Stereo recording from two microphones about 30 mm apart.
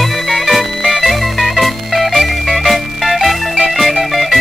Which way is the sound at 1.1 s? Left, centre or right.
Centre.